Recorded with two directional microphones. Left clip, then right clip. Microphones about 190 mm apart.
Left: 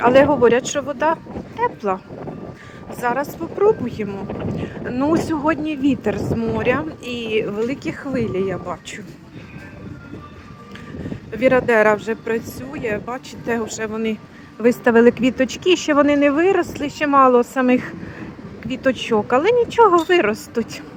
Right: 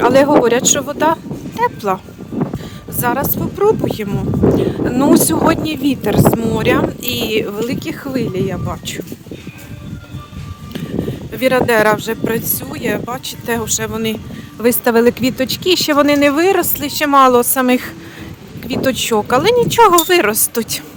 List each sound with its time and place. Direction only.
0.0 s speech: 20° right (ahead or behind)
3.0 s speech: 15° right (ahead or behind)
11.3 s speech: 20° right (ahead or behind)